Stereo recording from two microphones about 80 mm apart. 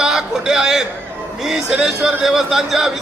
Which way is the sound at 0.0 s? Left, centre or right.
Centre.